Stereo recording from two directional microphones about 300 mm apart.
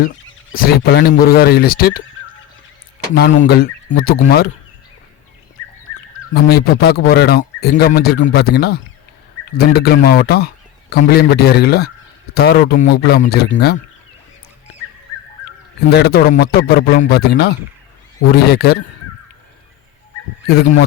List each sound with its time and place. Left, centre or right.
0.5 s speech: left
3.2 s speech: left
6.3 s speech: left
15.9 s speech: left